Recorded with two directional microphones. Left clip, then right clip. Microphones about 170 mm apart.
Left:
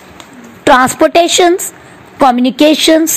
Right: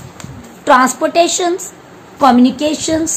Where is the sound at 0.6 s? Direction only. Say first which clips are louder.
Left 3 dB; 45° left (ahead or behind).